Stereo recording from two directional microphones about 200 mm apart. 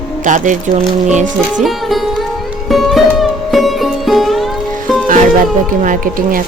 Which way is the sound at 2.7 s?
Centre (ahead or behind).